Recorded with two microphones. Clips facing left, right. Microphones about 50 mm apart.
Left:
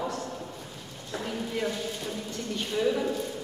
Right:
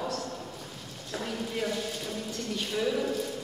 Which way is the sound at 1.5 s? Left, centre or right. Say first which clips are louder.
Left 1 dB; centre.